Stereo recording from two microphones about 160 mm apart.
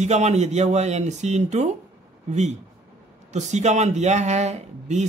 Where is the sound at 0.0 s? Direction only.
45° right (ahead or behind).